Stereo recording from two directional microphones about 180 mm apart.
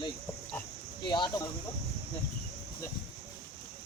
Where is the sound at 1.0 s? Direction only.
25° left (ahead or behind).